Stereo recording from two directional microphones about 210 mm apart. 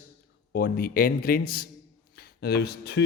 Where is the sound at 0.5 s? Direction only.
45° left (ahead or behind).